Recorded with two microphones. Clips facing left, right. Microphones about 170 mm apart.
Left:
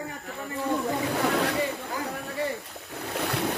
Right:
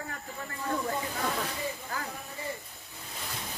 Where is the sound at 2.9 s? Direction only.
70° left (ahead or behind).